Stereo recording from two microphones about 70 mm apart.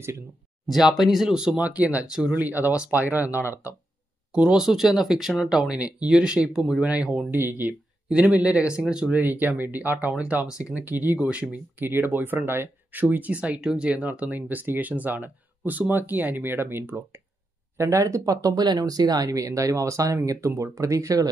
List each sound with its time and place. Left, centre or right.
0.7 s speech: centre; by 2.0 s right
2.0 s speech: centre
2.3 s speech: right
4.3 s speech: centre
7.2 s speech: right
8.1 s speech: centre
9.1 s speech: right
12.1 s speech: right
17.7 s speech: right
18.6 s speech: right